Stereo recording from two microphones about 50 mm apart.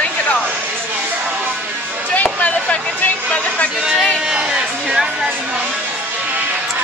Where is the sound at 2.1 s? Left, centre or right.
Left.